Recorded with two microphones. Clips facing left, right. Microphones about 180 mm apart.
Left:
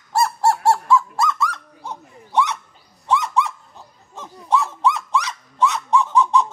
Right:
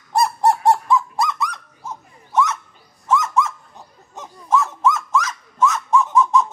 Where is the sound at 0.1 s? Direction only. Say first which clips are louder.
Right 1 dB; 15° right (ahead or behind).